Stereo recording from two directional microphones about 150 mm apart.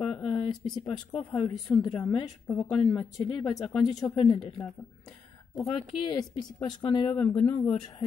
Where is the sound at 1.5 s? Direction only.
Centre (ahead or behind).